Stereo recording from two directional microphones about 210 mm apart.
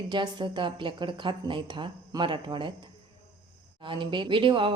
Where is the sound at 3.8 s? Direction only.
25° right (ahead or behind).